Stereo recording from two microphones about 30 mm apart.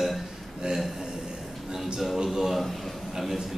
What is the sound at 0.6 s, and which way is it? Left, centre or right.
Speech, right.